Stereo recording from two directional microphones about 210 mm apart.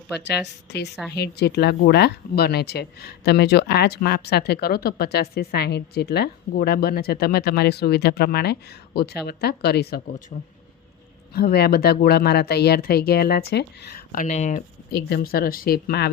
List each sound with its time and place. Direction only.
0.3 s speech: 55° left (ahead or behind)
11.3 s speech: 50° left (ahead or behind); by 14.6 s 35° left (ahead or behind)
14.9 s speech: 45° left (ahead or behind)